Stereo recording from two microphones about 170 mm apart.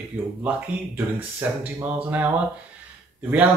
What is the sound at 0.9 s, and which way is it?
Speech, 10° right (ahead or behind).